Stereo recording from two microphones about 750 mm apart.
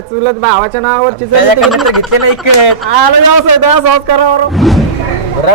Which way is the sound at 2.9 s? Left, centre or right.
Right.